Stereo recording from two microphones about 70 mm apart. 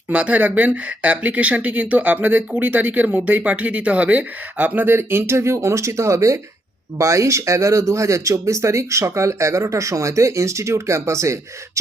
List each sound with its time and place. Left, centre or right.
0.1 s speech: right